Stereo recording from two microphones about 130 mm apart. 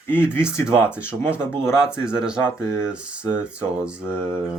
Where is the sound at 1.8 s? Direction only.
5° right (ahead or behind).